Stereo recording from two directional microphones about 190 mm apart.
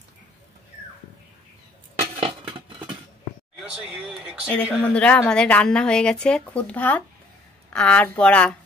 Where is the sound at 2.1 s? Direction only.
30° right (ahead or behind).